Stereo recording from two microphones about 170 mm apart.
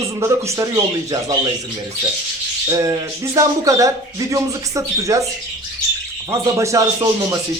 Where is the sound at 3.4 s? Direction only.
20° right (ahead or behind).